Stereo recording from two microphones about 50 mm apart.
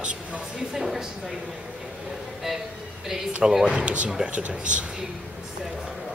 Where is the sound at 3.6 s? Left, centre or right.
Right.